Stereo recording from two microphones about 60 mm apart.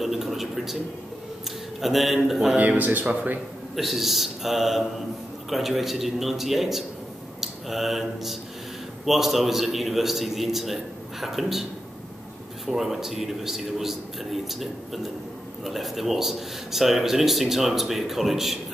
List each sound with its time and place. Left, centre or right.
0.0 s speech: centre
1.8 s speech: centre
2.6 s speech: right
3.7 s speech: centre
12.6 s speech: centre